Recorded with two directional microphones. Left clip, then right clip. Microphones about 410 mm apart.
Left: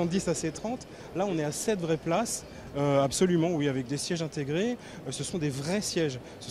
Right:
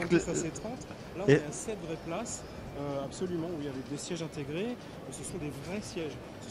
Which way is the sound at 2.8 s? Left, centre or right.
Centre.